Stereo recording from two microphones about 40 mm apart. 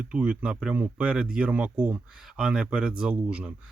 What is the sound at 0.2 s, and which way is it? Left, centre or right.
Speech, right.